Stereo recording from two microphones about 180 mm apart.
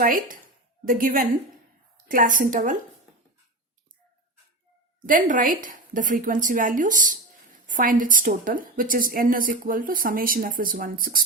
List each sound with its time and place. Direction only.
0.0 s a woman's voice: 50° right (ahead or behind)
5.0 s a woman's voice: 50° right (ahead or behind)